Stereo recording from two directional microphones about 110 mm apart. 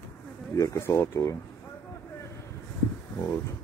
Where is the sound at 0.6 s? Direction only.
25° left (ahead or behind).